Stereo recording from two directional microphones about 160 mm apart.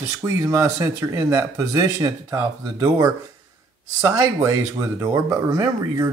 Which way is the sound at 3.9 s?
20° right (ahead or behind).